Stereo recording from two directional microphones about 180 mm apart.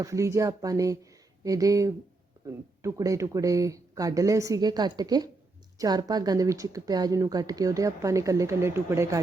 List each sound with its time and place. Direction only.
0.0 s a woman's voice: 15° right (ahead or behind)